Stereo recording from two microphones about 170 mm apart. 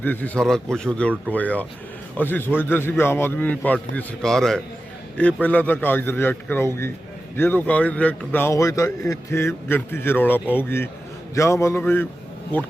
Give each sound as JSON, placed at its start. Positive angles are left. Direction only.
{"t": 0.0, "sound": "a man's voice", "side_deg": 10}